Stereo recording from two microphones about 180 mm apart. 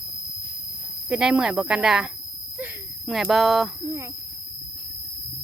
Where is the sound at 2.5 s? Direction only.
5° right (ahead or behind).